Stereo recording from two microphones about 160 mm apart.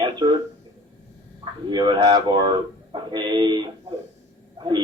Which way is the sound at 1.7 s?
30° right (ahead or behind).